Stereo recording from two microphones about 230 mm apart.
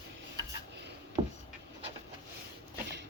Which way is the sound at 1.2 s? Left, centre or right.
Right.